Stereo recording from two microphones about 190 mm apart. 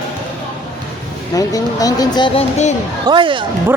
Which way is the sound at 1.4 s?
20° left (ahead or behind).